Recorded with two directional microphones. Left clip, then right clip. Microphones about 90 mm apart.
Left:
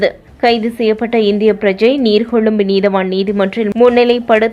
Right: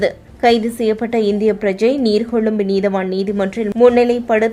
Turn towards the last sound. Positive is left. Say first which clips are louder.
# left 4 dB
turn(degrees=15)  # may be behind; listen again after turning